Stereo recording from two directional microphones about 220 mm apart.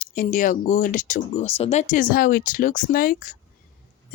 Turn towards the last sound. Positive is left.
turn(degrees=40)  # may be behind; listen again after turning